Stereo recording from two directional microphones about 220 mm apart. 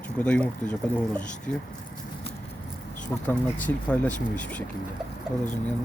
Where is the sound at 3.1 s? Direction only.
5° left (ahead or behind).